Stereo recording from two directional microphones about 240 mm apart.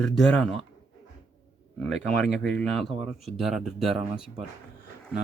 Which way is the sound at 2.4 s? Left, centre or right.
Centre.